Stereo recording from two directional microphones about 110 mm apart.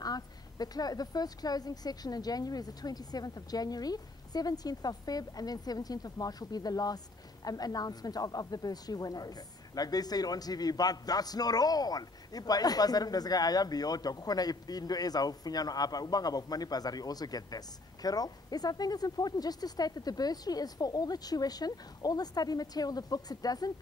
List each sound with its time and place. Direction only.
0.0 s a woman's voice: 35° left (ahead or behind)